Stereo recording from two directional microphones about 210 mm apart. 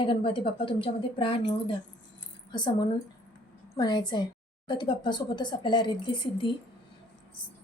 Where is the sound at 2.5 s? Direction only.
20° left (ahead or behind).